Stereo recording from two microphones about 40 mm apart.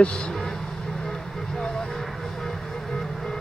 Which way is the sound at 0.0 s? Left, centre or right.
Left.